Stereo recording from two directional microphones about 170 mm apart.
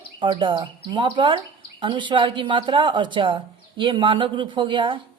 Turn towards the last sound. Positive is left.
turn(degrees=-30)  # may be behind; listen again after turning